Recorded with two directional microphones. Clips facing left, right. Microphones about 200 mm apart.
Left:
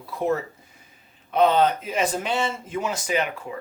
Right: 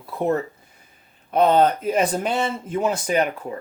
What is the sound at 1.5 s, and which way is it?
Speech, 50° right (ahead or behind).